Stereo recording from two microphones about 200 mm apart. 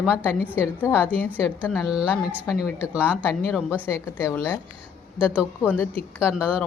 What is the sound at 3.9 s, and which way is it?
Speech, 15° left (ahead or behind).